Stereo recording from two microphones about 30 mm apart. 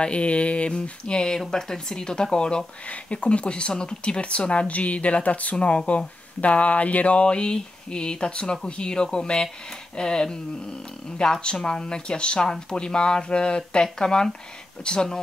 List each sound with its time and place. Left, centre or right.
0.0 s speech: left
7.2 s speech: left